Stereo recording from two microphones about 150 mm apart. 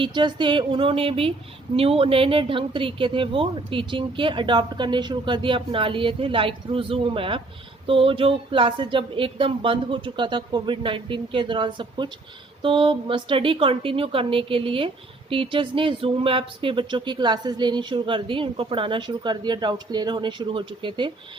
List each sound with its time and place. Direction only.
0.0 s speech: 30° right (ahead or behind)